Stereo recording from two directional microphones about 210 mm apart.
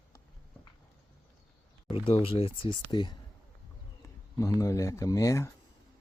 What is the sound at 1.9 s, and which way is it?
Speech, 25° left (ahead or behind).